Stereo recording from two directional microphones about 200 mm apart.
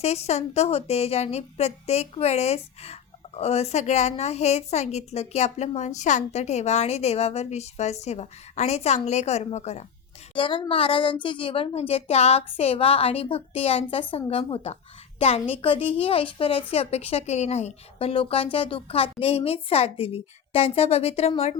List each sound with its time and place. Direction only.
0.0 s a woman's voice: 30° left (ahead or behind)